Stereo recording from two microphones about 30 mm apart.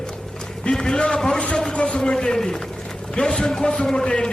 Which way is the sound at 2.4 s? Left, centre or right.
Centre.